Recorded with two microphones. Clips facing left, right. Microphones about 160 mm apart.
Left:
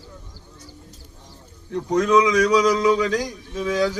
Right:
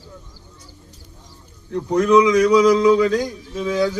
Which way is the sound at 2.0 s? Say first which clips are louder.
Right 3 dB; 25° right (ahead or behind).